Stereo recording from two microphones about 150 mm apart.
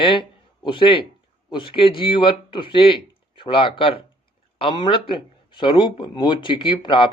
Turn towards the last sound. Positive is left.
turn(degrees=35)  # may be behind; listen again after turning